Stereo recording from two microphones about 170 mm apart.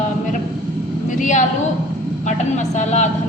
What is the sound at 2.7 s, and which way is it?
Speech, 45° left (ahead or behind).